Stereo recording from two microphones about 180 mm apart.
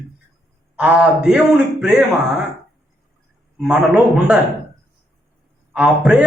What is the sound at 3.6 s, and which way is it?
Speech, 5° right (ahead or behind).